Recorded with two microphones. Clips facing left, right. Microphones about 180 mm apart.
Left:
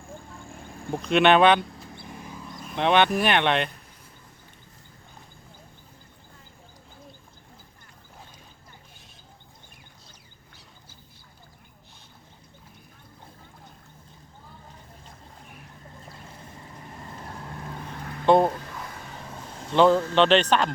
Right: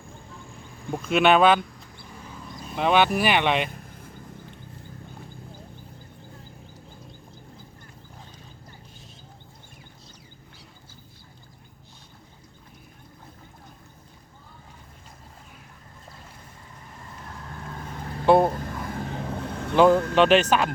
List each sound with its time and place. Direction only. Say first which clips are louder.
1.0 s speech: even; 5° right (ahead or behind)
2.7 s speech: even; 5° right (ahead or behind)
18.3 s a sound: right 1 dB; 10° right (ahead or behind)
18.5 s vehicle: right 6 dB; 50° right (ahead or behind)
19.7 s a sound: right 1 dB; 10° right (ahead or behind)
20.1 s speech: right 1 dB; 10° right (ahead or behind)